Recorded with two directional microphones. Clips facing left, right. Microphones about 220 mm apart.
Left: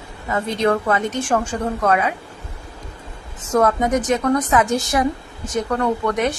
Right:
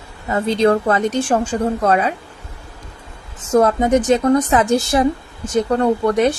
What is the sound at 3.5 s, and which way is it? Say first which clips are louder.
A woman's voice: right 4 dB; 30° right (ahead or behind).